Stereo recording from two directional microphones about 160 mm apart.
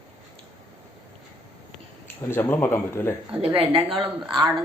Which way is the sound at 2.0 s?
15° left (ahead or behind).